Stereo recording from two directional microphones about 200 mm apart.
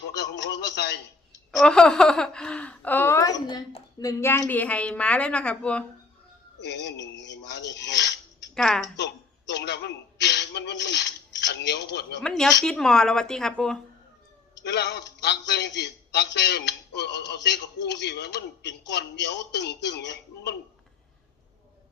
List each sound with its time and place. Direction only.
0.2 s a man's voice: 60° left (ahead or behind)
1.5 s speech: 5° left (ahead or behind); by 3.8 s 25° left (ahead or behind)
4.0 s a woman's voice: 15° left (ahead or behind)
6.6 s a man's voice: 60° left (ahead or behind)
8.5 s speech: 5° left (ahead or behind)
9.5 s a man's voice: 60° left (ahead or behind)
12.2 s speech: centre (ahead or behind)
14.6 s a man's voice: 60° left (ahead or behind)